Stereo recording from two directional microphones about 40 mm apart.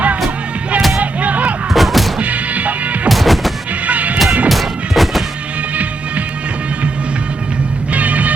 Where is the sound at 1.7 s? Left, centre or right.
Centre.